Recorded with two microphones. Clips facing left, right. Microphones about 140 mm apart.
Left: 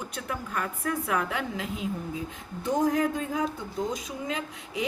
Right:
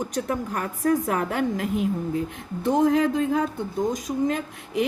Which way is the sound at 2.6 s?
65° right (ahead or behind).